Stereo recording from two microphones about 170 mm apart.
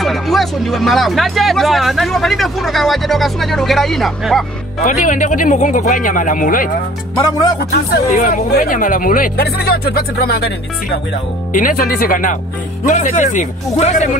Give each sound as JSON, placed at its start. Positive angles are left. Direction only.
{"t": 0.0, "sound": "speech", "side_deg": 0}
{"t": 4.8, "sound": "speech", "side_deg": 50}
{"t": 7.2, "sound": "music", "side_deg": 25}
{"t": 7.7, "sound": "speech", "side_deg": 60}
{"t": 11.5, "sound": "speech", "side_deg": 55}